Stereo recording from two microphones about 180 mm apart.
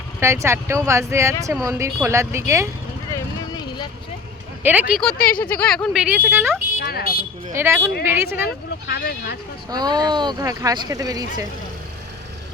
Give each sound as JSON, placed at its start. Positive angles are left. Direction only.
{"t": 0.2, "sound": "speech", "side_deg": -15}
{"t": 3.1, "sound": "vehicle", "side_deg": 20}
{"t": 4.6, "sound": "speech", "side_deg": -10}
{"t": 5.1, "sound": "speech", "side_deg": 55}
{"t": 5.4, "sound": "speech", "side_deg": 10}
{"t": 6.7, "sound": "a sound", "side_deg": 60}
{"t": 7.5, "sound": "speech", "side_deg": -15}
{"t": 8.4, "sound": "speech", "side_deg": 60}
{"t": 9.6, "sound": "speech", "side_deg": -20}